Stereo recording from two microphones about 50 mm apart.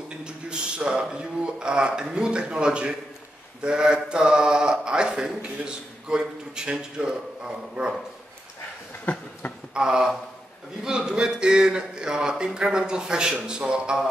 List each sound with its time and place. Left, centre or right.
0.2 s speech: centre
9.1 s a sound: left
9.8 s speech: centre